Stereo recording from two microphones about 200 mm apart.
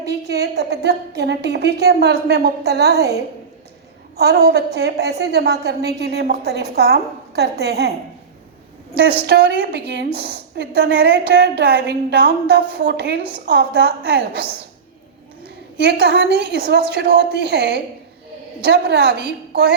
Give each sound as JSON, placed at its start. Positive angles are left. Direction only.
{"t": 0.0, "sound": "a woman's voice", "side_deg": -55}
{"t": 4.2, "sound": "a woman's voice", "side_deg": -55}
{"t": 9.2, "sound": "a woman's voice", "side_deg": -55}
{"t": 15.4, "sound": "a woman's voice", "side_deg": -55}